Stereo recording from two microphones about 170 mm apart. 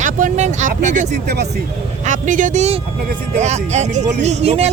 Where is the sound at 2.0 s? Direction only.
50° right (ahead or behind).